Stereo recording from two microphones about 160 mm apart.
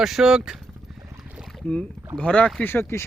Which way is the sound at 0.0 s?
Centre (ahead or behind).